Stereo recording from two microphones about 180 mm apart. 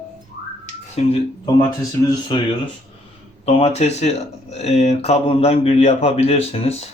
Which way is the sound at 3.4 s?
35° left (ahead or behind).